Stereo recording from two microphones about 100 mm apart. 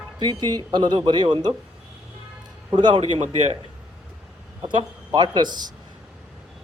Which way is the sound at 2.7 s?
50° right (ahead or behind).